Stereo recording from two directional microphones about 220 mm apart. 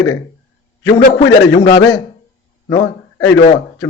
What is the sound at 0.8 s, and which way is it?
Speech, 55° left (ahead or behind).